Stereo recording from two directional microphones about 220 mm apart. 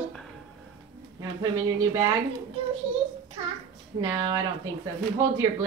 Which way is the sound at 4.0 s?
15° right (ahead or behind).